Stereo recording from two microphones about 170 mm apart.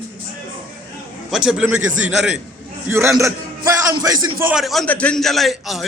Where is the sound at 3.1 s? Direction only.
20° right (ahead or behind).